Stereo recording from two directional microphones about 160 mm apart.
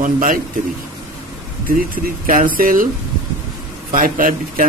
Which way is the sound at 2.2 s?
60° right (ahead or behind).